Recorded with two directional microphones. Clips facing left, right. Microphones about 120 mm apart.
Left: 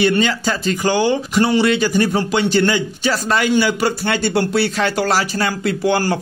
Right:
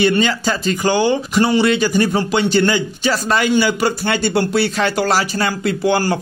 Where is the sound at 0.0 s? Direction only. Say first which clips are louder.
Right 1 dB; 25° right (ahead or behind).